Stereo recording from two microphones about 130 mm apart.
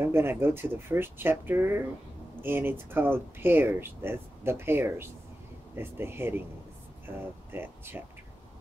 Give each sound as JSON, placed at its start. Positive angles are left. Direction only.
{"t": 0.0, "sound": "speech", "side_deg": -20}